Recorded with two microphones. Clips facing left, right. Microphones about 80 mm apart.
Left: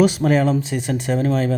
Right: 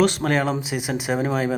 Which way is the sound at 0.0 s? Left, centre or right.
Centre.